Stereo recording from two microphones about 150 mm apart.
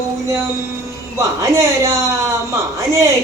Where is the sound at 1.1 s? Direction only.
20° right (ahead or behind).